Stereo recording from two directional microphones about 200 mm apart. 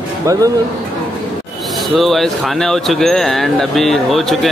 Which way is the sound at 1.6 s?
Centre (ahead or behind).